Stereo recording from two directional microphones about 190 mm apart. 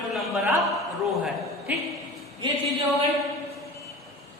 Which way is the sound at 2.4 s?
25° right (ahead or behind).